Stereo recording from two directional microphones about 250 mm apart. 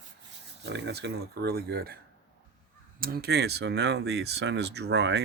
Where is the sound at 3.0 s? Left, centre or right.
Right.